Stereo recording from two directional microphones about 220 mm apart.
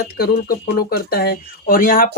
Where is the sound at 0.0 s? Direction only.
45° left (ahead or behind).